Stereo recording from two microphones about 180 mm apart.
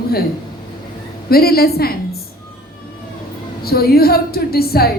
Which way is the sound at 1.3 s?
60° left (ahead or behind).